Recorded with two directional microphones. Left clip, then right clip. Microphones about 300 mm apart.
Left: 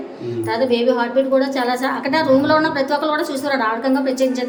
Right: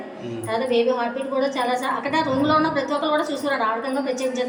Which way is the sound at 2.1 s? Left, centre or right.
Centre.